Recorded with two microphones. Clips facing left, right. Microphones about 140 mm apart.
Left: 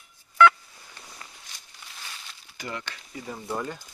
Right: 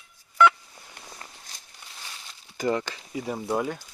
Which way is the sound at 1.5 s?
40° right (ahead or behind).